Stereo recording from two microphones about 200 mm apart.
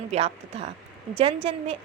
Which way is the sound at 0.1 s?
30° right (ahead or behind).